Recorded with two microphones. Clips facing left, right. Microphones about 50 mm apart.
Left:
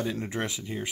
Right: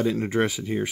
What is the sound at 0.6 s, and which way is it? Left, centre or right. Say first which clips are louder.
Speech: right 8 dB; right.